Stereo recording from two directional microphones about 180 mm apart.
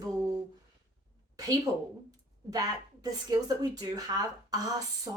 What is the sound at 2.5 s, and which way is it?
A woman's voice, 20° right (ahead or behind).